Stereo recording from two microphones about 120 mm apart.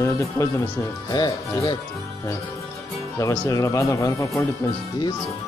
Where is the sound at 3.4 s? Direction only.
30° left (ahead or behind).